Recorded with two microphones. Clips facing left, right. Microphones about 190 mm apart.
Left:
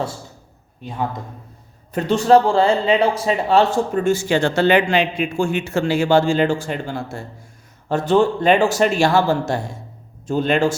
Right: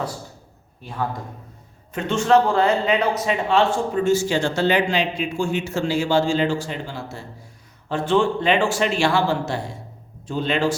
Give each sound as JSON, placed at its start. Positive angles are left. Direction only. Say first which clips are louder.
{"t": 0.8, "sound": "a man's voice", "louder": "left 2 dB", "side_deg": 20}
{"t": 1.9, "sound": "a man's voice", "louder": "left 4 dB", "side_deg": 35}